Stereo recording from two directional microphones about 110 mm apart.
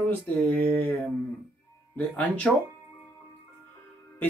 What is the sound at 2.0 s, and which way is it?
Speech, 15° left (ahead or behind).